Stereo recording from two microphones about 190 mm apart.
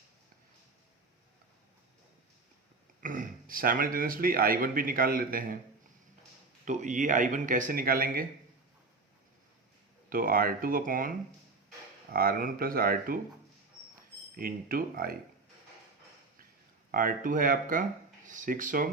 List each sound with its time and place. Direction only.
3.0 s speech: 45° right (ahead or behind)
6.7 s speech: 40° right (ahead or behind)
10.1 s speech: 50° right (ahead or behind)
12.1 s speech: 50° right (ahead or behind)
14.3 s speech: 50° right (ahead or behind)
16.9 s speech: 50° right (ahead or behind)